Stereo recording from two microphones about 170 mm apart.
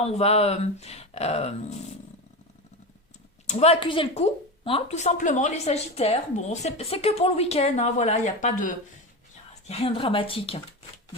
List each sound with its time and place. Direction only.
0.0 s speech: 35° left (ahead or behind)
3.4 s speech: 40° left (ahead or behind)